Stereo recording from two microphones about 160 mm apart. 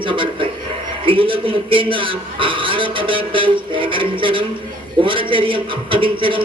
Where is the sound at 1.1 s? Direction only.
35° right (ahead or behind).